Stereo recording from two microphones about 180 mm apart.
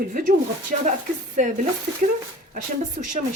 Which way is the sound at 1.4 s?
45° right (ahead or behind).